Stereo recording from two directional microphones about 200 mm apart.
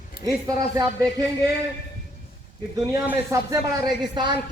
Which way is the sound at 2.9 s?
15° right (ahead or behind).